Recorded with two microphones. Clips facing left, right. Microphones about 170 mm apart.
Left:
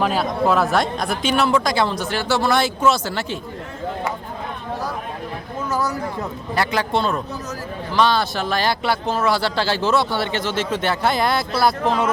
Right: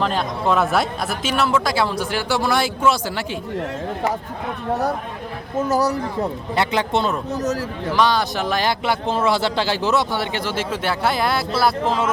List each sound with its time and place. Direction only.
0.0 s speech: 5° left (ahead or behind); by 3.2 s 10° right (ahead or behind)
5.6 s speech: 40° right (ahead or behind)
6.6 s speech: 20° right (ahead or behind); by 11.7 s 5° right (ahead or behind)